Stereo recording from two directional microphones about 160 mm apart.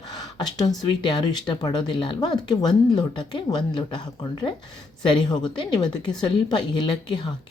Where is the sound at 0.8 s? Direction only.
25° left (ahead or behind).